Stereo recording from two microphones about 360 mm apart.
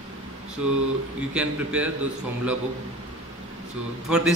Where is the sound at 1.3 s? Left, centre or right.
Centre.